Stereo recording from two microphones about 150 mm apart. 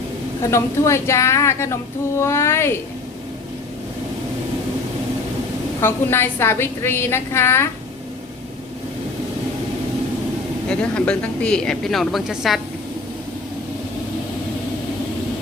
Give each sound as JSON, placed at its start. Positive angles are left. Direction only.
{"t": 0.4, "sound": "a woman's voice", "side_deg": 20}
{"t": 5.8, "sound": "a woman's voice", "side_deg": 15}
{"t": 10.7, "sound": "a woman's voice", "side_deg": 5}